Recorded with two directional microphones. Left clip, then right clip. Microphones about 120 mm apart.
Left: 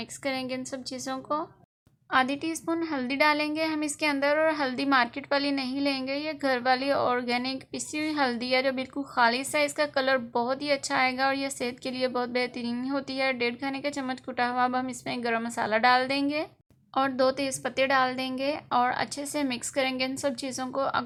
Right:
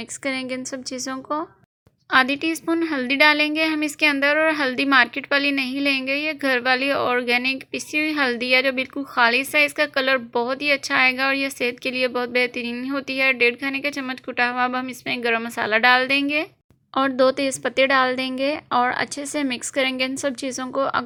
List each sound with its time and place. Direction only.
0.3 s a woman's voice: 30° right (ahead or behind)
16.9 s a woman's voice: 40° right (ahead or behind)